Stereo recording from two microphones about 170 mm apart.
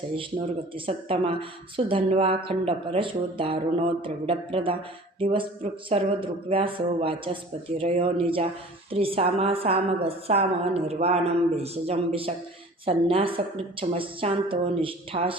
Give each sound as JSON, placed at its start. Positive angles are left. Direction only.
{"t": 0.9, "sound": "a woman's voice", "side_deg": -30}